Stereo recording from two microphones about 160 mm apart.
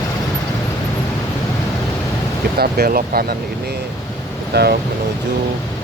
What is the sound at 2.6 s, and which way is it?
Speech, 70° right (ahead or behind).